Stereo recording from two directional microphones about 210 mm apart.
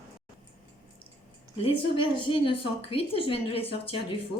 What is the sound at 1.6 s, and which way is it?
A woman's voice, 25° left (ahead or behind).